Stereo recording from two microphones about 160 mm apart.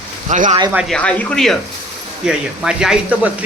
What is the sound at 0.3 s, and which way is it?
Speech, 50° right (ahead or behind).